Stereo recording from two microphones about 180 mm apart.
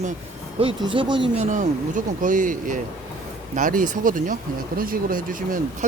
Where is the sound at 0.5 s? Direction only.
30° right (ahead or behind).